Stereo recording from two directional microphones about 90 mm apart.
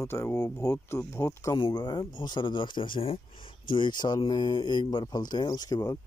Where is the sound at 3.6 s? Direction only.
65° left (ahead or behind).